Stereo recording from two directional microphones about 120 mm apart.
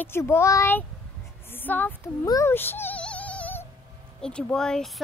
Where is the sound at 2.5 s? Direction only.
20° left (ahead or behind).